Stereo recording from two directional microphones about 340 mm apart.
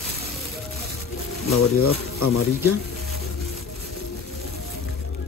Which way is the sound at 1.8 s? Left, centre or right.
Left.